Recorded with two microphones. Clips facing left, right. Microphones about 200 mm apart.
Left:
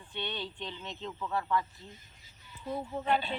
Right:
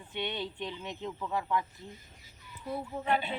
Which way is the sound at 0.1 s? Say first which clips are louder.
Right 3 dB; 15° right (ahead or behind).